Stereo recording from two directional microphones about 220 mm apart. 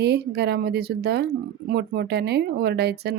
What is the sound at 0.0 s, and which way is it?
Speech, 50° right (ahead or behind).